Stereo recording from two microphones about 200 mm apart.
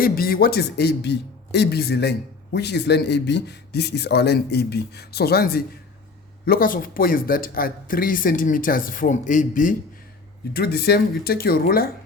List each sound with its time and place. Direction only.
0.0 s a man's voice: 45° left (ahead or behind)
10.5 s speech: 50° left (ahead or behind)